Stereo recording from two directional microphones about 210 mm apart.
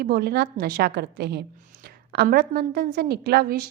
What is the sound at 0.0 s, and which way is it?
A woman's voice, 45° right (ahead or behind).